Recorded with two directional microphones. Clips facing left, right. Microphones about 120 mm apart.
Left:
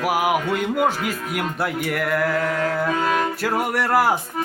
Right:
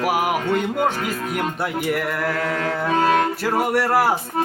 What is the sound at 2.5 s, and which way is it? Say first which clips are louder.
Music: even; 35° right (ahead or behind).